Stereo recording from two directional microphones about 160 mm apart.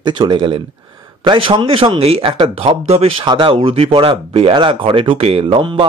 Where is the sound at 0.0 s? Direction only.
30° right (ahead or behind).